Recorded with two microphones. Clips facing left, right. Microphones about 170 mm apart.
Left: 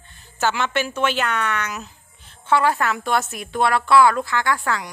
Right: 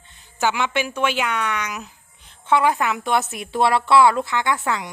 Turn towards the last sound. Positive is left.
turn(degrees=-20)  # may be behind; listen again after turning